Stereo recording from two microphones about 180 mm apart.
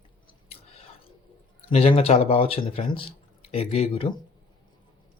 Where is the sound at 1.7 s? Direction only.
35° left (ahead or behind).